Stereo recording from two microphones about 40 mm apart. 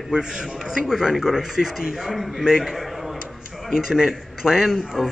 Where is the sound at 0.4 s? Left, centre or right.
Centre.